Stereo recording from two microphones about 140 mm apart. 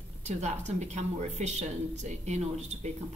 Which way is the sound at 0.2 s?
55° right (ahead or behind).